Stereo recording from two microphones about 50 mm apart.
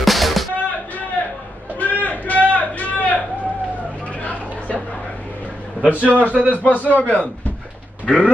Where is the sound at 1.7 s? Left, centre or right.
Left.